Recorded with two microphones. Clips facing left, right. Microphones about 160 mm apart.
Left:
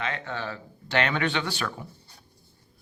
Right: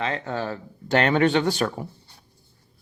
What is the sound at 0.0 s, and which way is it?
Speech, 35° right (ahead or behind).